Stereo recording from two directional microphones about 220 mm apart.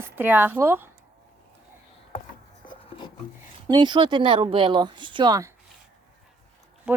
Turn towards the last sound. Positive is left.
turn(degrees=-5)  # may be behind; listen again after turning